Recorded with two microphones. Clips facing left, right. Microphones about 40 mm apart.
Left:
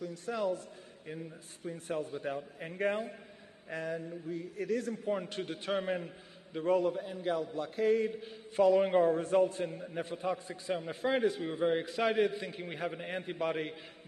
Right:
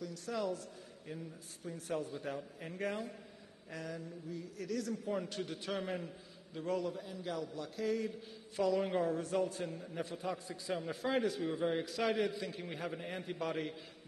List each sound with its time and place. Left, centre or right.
0.0 s a man's voice: left